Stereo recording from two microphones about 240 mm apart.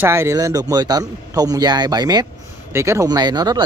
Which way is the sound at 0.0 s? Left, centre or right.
Centre.